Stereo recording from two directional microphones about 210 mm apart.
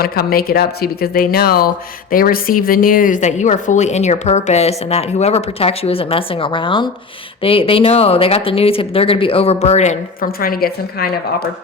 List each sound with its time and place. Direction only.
0.0 s speech: 45° left (ahead or behind)